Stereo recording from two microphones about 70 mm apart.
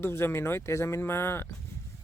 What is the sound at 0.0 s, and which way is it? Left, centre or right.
Speech, left.